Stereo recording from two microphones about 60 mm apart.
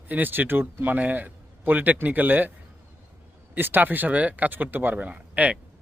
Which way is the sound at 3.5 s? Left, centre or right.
Right.